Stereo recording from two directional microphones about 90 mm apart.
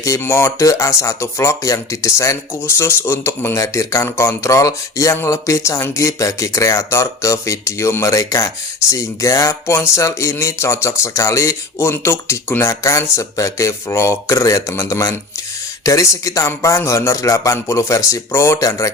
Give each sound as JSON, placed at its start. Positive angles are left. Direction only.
{"t": 0.2, "sound": "speech", "side_deg": 30}